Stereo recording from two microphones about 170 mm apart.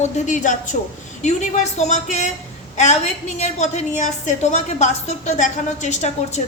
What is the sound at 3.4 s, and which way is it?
A woman's voice, 45° left (ahead or behind).